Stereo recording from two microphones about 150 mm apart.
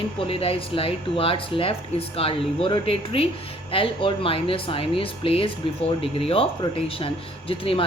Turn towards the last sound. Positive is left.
turn(degrees=35)  # may be behind; listen again after turning